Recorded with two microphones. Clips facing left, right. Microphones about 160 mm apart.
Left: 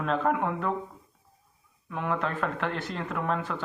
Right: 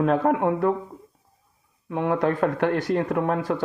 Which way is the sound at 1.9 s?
35° right (ahead or behind).